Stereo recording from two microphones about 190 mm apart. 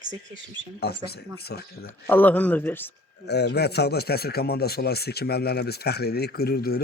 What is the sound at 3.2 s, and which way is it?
Speech, 60° left (ahead or behind).